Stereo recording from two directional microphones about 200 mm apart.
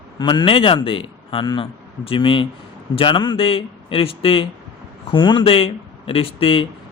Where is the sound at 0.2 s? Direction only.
20° left (ahead or behind).